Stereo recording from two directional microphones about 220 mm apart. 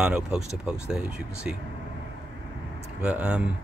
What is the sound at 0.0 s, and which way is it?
Speech, 5° right (ahead or behind).